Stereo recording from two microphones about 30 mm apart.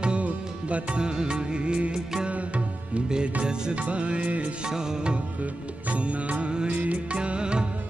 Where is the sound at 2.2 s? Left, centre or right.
Right.